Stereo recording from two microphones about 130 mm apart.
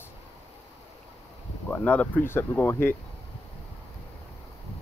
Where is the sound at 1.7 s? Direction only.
10° left (ahead or behind).